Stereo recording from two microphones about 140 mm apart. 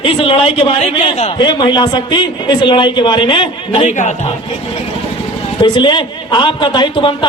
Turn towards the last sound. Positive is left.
turn(degrees=35)  # may be behind; listen again after turning